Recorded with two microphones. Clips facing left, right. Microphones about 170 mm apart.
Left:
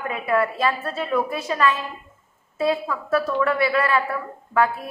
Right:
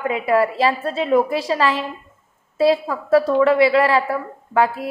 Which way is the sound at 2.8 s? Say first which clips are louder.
Right 6 dB; 30° right (ahead or behind).